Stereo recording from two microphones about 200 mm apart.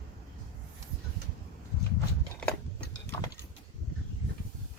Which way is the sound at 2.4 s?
5° left (ahead or behind).